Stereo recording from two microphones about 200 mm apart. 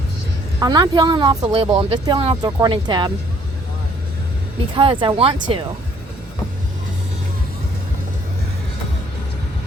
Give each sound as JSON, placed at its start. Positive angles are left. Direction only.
{"t": 0.6, "sound": "speech", "side_deg": -20}
{"t": 4.7, "sound": "speech", "side_deg": -25}